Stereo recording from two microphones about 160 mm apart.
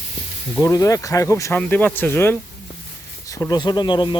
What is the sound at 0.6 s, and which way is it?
Speech, 20° left (ahead or behind).